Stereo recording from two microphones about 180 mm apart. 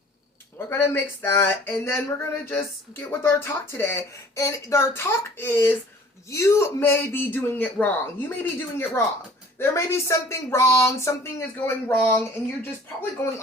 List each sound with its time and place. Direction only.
0.7 s speech: 15° left (ahead or behind)